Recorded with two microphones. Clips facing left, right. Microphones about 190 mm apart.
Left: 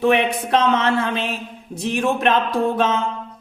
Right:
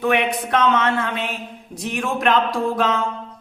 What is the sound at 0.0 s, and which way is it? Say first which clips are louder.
Speech: left 2 dB; 25° left (ahead or behind).